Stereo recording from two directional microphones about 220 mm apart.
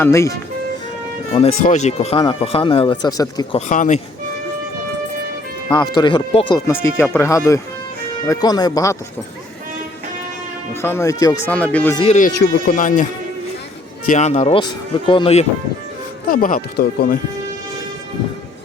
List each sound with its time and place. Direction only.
0.0 s speech: 10° left (ahead or behind)
1.4 s speech: 30° left (ahead or behind)
3.7 s speech: 35° left (ahead or behind)
5.6 s speech: 20° left (ahead or behind)
10.8 s speech: 10° left (ahead or behind)
11.9 s speech: 30° left (ahead or behind)
14.1 s speech: 30° left (ahead or behind)
16.3 s speech: 40° left (ahead or behind)